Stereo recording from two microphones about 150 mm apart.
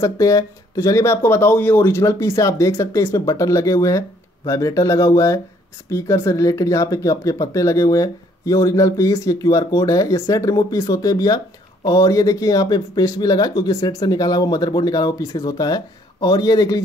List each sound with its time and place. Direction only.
0.0 s speech: 20° left (ahead or behind)